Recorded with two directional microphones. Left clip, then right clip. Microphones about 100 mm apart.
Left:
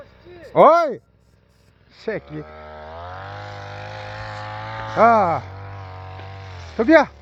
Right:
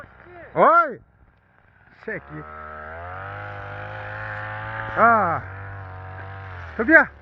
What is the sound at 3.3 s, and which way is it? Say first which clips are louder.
Vehicle: even; 20° left (ahead or behind).